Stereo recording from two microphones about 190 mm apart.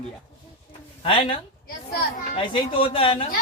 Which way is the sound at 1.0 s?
25° left (ahead or behind).